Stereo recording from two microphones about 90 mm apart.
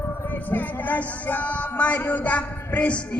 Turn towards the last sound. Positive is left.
turn(degrees=15)  # may be behind; listen again after turning